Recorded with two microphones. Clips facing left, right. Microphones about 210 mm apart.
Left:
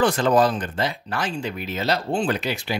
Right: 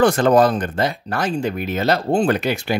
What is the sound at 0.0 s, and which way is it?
Speech, 45° right (ahead or behind).